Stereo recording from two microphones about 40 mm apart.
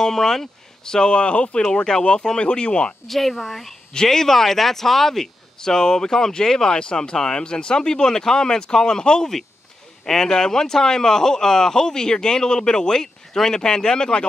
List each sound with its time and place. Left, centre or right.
0.0 s speech: centre
1.1 s speech: left
3.1 s speech: centre
3.9 s speech: centre